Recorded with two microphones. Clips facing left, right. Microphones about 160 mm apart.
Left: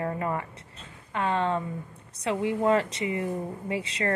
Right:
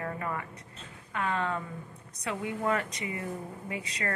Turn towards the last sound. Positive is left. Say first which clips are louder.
# left 6 dB
turn(degrees=25)  # may be behind; listen again after turning